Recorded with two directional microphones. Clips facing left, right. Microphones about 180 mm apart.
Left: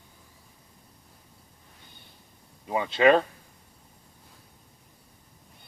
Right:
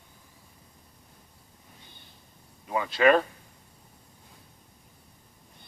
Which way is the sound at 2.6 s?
25° left (ahead or behind).